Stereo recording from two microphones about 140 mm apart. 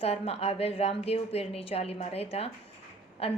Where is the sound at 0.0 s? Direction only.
45° left (ahead or behind).